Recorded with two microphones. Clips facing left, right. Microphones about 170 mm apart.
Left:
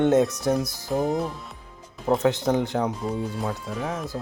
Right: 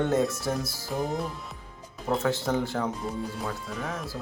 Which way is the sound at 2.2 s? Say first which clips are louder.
Left 3 dB; 20° left (ahead or behind).